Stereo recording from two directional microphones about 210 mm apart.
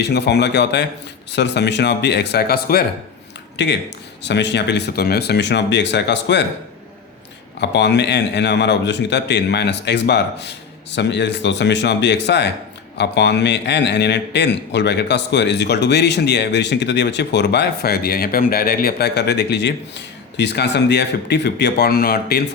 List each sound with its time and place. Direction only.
0.0 s a man's voice: 50° left (ahead or behind)
7.6 s a man's voice: 55° left (ahead or behind)